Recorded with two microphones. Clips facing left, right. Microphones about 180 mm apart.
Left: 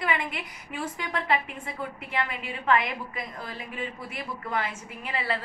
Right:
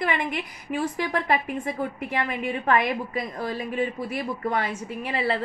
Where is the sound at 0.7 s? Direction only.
40° right (ahead or behind).